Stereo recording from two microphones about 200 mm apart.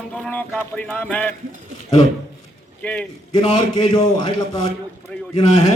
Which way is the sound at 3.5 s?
20° left (ahead or behind).